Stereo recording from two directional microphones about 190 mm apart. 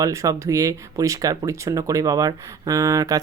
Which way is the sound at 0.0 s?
15° right (ahead or behind).